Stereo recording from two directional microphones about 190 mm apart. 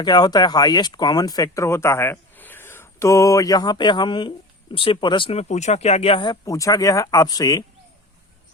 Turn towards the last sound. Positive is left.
turn(degrees=20)  # may be behind; listen again after turning